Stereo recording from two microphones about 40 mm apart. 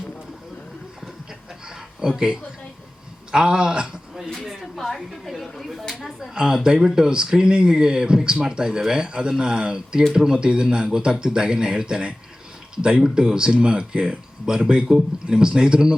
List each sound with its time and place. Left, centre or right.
2.0 s speech: centre
4.8 s speech: centre
6.3 s speech: centre